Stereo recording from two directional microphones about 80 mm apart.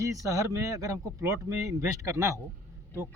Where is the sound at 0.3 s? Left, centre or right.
Right.